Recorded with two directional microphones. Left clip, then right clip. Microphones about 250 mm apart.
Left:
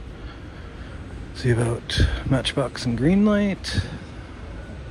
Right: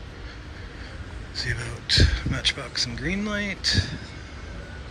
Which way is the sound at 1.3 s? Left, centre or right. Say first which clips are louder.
Left 6 dB; centre.